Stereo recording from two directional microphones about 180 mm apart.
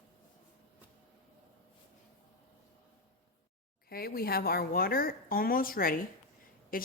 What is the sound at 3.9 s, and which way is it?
A woman's voice, 60° left (ahead or behind).